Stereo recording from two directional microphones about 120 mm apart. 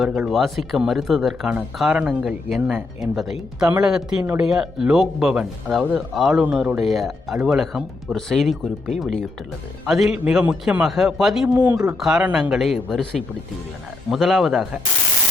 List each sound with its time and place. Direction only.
0.3 s speech: centre (ahead or behind)
11.5 s speech: 15° right (ahead or behind)
11.9 s speech: 5° right (ahead or behind)